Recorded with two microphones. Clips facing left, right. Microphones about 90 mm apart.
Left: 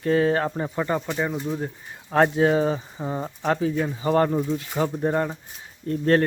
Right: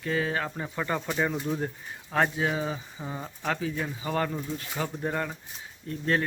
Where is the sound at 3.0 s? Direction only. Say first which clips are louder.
Left 6 dB; 30° left (ahead or behind).